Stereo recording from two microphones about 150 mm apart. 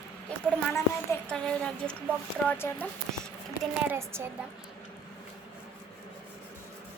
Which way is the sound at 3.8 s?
15° right (ahead or behind).